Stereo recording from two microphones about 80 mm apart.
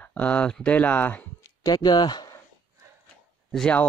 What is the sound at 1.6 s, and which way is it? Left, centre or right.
Speech, left.